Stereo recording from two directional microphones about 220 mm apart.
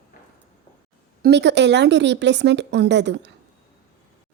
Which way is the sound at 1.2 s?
50° right (ahead or behind).